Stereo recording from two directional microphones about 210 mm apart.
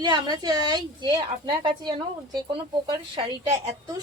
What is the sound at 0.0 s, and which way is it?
A woman's voice, 20° right (ahead or behind).